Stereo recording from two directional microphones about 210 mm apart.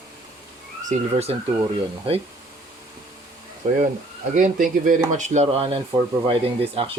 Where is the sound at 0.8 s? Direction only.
30° right (ahead or behind).